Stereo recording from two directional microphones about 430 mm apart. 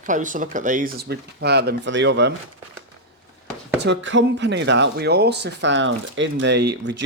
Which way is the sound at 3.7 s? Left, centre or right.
Right.